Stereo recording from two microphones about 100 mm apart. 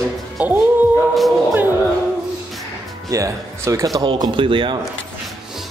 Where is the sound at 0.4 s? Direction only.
15° right (ahead or behind).